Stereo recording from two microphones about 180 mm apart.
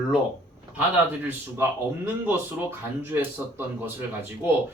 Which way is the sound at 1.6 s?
10° right (ahead or behind).